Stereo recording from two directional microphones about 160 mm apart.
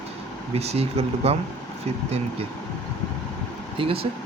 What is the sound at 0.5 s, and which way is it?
Speech, 40° right (ahead or behind).